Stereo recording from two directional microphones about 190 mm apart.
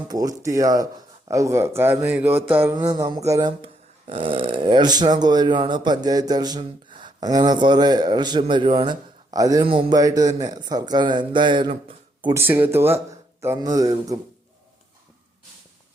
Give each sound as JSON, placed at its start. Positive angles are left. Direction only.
{"t": 0.1, "sound": "speech", "side_deg": -20}
{"t": 3.6, "sound": "speech", "side_deg": -30}
{"t": 12.3, "sound": "speech", "side_deg": -10}